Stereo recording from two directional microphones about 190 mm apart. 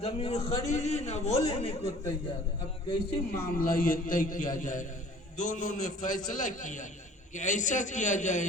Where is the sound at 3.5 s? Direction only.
50° left (ahead or behind).